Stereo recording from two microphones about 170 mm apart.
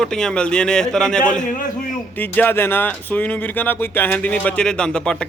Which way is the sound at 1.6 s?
55° left (ahead or behind).